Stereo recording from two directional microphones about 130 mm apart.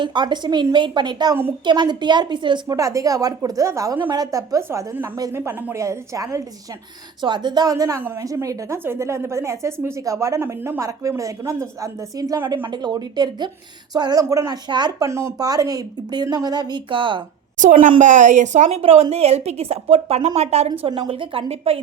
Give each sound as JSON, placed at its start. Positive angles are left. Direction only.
{"t": 0.0, "sound": "speech", "side_deg": -35}
{"t": 2.7, "sound": "a woman's voice", "side_deg": -25}
{"t": 17.6, "sound": "a woman's voice", "side_deg": -75}
{"t": 20.8, "sound": "a woman's voice", "side_deg": -45}